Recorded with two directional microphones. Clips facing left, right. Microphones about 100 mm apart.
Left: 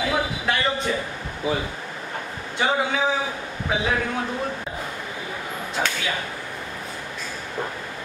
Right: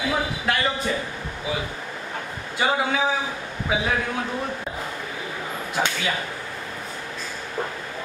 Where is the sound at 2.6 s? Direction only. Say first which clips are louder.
Even; 5° right (ahead or behind).